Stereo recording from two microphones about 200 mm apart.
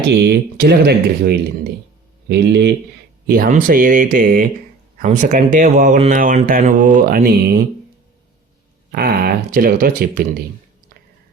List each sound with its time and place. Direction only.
0.1 s speech: 55° right (ahead or behind)
3.2 s speech: 45° right (ahead or behind)
8.9 s speech: 50° right (ahead or behind)